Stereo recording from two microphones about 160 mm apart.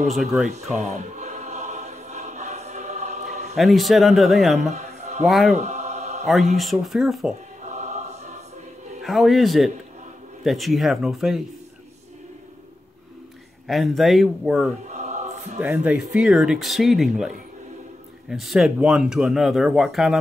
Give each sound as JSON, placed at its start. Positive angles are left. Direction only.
{"t": 0.7, "sound": "choir", "side_deg": -45}
{"t": 3.5, "sound": "speech", "side_deg": 0}
{"t": 4.6, "sound": "a sound", "side_deg": -45}
{"t": 5.2, "sound": "speech", "side_deg": 0}
{"t": 5.6, "sound": "mantra", "side_deg": -45}
{"t": 6.5, "sound": "speech", "side_deg": 0}
{"t": 7.6, "sound": "choir", "side_deg": -45}
{"t": 9.0, "sound": "speech", "side_deg": 0}
{"t": 13.7, "sound": "speech", "side_deg": 0}
{"t": 14.9, "sound": "choir", "side_deg": -45}
{"t": 15.6, "sound": "speech", "side_deg": -10}
{"t": 18.3, "sound": "speech", "side_deg": 0}